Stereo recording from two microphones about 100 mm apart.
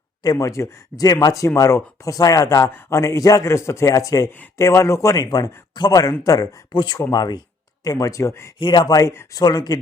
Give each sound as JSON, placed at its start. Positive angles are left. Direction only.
{"t": 0.2, "sound": "speech", "side_deg": 35}
{"t": 8.5, "sound": "speech", "side_deg": 45}